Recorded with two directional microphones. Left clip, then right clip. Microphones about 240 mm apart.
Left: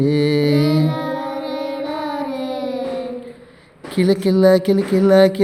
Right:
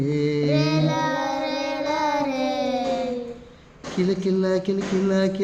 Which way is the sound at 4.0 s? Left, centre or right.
Left.